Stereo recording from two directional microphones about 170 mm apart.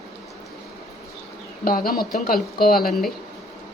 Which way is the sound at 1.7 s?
60° left (ahead or behind).